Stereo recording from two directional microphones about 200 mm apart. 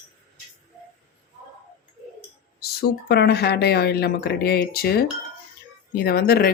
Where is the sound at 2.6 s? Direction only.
50° left (ahead or behind).